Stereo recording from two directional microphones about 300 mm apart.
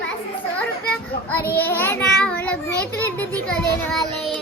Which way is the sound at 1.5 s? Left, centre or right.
Centre.